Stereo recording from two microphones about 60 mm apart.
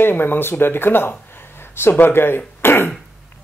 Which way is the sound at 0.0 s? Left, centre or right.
Left.